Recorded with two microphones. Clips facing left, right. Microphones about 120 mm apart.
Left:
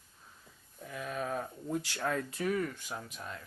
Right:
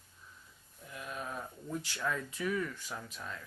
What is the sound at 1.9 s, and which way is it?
Speech, 50° left (ahead or behind).